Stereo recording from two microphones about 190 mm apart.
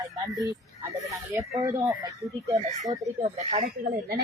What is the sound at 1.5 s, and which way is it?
Speech, 15° right (ahead or behind).